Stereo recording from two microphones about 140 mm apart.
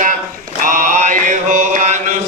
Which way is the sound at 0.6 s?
70° right (ahead or behind).